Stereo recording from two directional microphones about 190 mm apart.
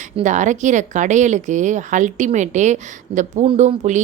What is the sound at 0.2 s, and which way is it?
Speech, 40° right (ahead or behind).